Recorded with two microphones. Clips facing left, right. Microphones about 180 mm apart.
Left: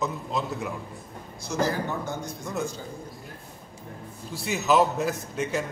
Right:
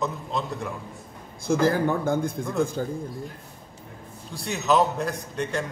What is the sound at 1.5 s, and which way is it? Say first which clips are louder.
Speech: right 6 dB; 55° right (ahead or behind).